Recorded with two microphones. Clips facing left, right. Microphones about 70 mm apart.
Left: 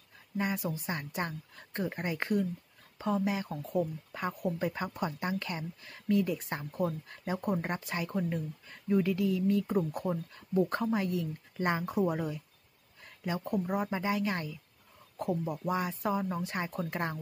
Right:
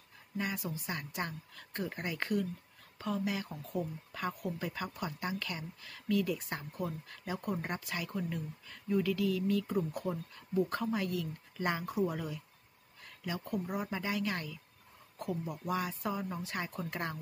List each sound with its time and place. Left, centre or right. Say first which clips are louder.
0.4 s speech: left 4 dB; left